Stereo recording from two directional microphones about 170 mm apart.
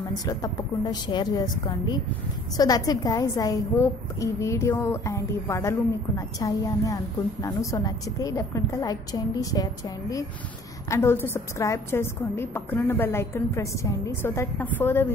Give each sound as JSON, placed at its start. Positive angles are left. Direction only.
{"t": 0.2, "sound": "a woman's voice", "side_deg": 20}